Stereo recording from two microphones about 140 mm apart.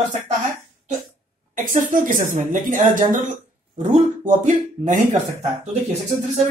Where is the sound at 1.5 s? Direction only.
70° right (ahead or behind).